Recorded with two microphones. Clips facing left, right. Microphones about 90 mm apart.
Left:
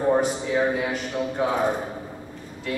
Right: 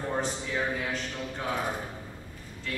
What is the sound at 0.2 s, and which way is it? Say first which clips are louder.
A man's voice: left 8 dB; 15° left (ahead or behind).